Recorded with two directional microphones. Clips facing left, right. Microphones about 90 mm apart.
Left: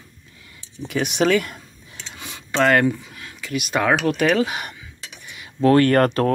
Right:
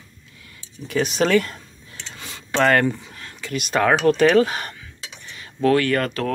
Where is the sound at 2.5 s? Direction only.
5° left (ahead or behind).